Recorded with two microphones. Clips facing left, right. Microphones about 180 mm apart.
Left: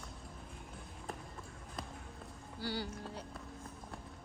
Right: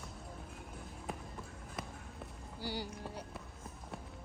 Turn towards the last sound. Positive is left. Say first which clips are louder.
# even
turn(degrees=-10)  # may be behind; listen again after turning